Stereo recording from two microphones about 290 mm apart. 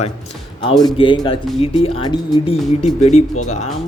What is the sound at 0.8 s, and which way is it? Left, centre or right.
Speech, centre.